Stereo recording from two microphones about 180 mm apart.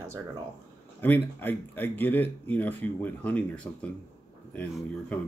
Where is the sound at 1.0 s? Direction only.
10° left (ahead or behind).